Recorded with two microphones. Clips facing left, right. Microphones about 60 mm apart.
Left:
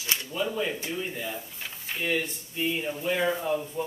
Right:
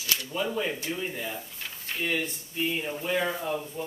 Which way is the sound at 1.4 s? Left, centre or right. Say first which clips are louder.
Left 1 dB; centre.